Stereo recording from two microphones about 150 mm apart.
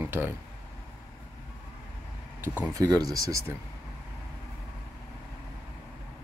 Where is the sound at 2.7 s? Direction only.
25° right (ahead or behind).